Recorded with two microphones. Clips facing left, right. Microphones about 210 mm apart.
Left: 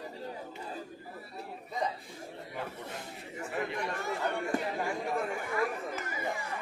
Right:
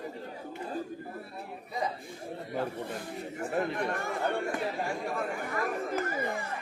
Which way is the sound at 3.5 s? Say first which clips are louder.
Right 4 dB; 50° right (ahead or behind).